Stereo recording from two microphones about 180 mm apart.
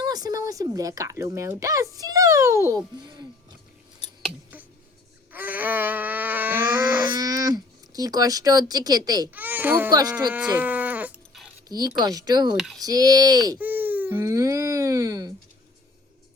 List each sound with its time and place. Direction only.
0.0 s speech: 20° right (ahead or behind)
4.0 s scissors: 5° right (ahead or behind)
5.3 s a sound: 10° right (ahead or behind)
7.1 s a sound: 20° right (ahead or behind)
9.3 s speech: 10° right (ahead or behind)
9.9 s speech: 20° right (ahead or behind)
10.3 s a sound: 10° right (ahead or behind)
11.7 s speech: 20° right (ahead or behind)
12.5 s speech: centre (ahead or behind)
12.8 s speech: 20° right (ahead or behind)
13.6 s baby cry: 10° right (ahead or behind)